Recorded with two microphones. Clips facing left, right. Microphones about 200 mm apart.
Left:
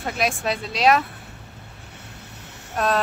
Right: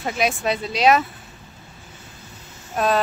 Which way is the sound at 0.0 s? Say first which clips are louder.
Right 2 dB; centre (ahead or behind).